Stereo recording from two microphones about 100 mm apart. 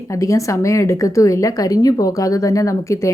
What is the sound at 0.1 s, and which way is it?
Speech, 35° left (ahead or behind).